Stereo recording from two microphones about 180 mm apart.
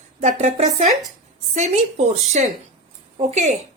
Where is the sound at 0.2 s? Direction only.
40° right (ahead or behind).